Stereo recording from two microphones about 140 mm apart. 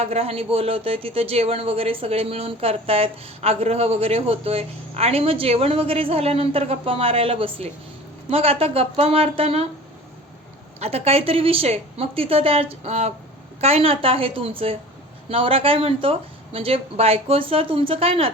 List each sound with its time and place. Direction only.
0.0 s speech: 45° right (ahead or behind)
10.8 s speech: 45° right (ahead or behind)